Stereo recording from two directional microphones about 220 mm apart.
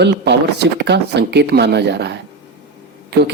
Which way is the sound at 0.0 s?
50° right (ahead or behind).